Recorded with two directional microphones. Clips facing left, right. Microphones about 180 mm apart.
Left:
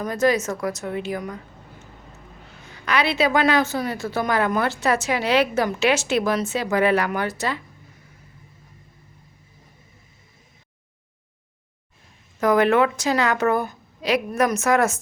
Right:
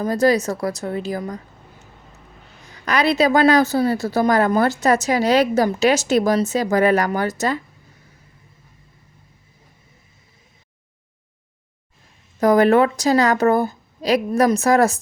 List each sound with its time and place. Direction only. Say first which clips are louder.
0.0 s a woman's voice: right 3 dB; 35° right (ahead or behind)
2.8 s a woman's voice: right 4 dB; 40° right (ahead or behind)
12.4 s a woman's voice: right 4 dB; 35° right (ahead or behind)